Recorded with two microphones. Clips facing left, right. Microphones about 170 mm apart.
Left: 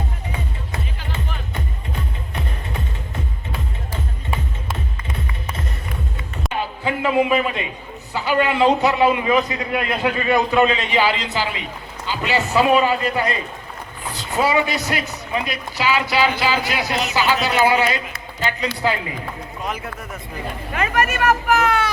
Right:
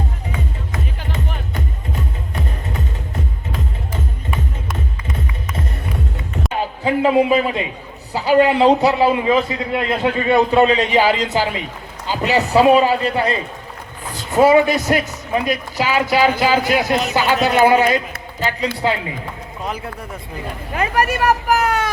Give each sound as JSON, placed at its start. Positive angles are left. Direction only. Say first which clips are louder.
{"t": 6.8, "sound": "a man's voice", "louder": "right 4 dB", "side_deg": -30}
{"t": 14.3, "sound": "speech", "louder": "right 7 dB", "side_deg": -50}
{"t": 18.8, "sound": "a man's voice", "louder": "even", "side_deg": -25}